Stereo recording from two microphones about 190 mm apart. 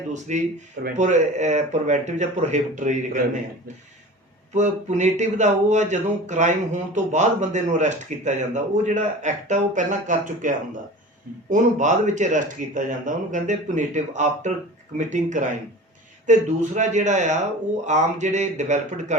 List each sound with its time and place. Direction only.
0.1 s speech: 40° right (ahead or behind)
4.5 s speech: 40° right (ahead or behind)